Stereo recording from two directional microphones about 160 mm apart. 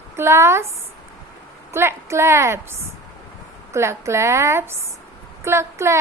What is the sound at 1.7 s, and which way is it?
Speech, 15° right (ahead or behind).